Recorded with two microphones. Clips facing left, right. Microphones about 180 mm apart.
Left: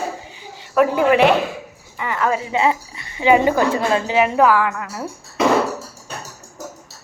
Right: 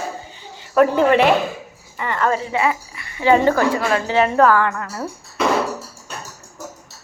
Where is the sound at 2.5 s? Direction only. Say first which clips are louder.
Left 2 dB; 25° left (ahead or behind).